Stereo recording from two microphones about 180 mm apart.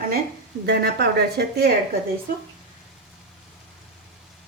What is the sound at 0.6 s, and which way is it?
Speech, 65° right (ahead or behind).